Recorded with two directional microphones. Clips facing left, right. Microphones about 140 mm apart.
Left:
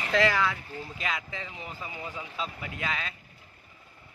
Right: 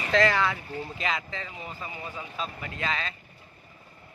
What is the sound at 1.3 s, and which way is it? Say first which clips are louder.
Speech: right 1 dB; 15° left (ahead or behind).